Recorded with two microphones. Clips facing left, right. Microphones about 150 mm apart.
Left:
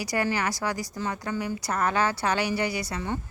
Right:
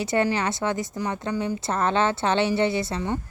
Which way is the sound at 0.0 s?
25° right (ahead or behind).